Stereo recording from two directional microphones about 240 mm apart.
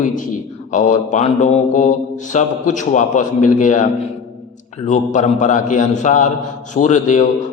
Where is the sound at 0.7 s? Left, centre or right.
Left.